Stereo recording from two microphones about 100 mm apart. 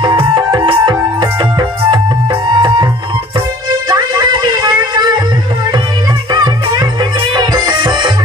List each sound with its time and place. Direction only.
0.7 s music: 50° right (ahead or behind)
3.9 s a sound: 45° right (ahead or behind)
6.3 s music: 45° right (ahead or behind)